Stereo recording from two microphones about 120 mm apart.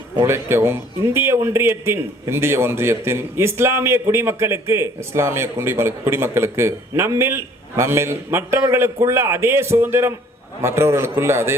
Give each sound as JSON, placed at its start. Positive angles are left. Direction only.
{"t": 0.2, "sound": "a man's voice", "side_deg": -20}